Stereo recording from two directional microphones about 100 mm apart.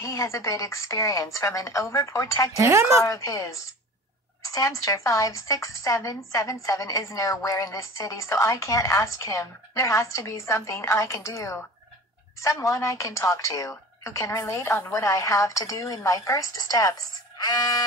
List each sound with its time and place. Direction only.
0.0 s speech: 30° left (ahead or behind)
2.5 s a woman's voice: 30° right (ahead or behind)
3.1 s speech: 30° left (ahead or behind)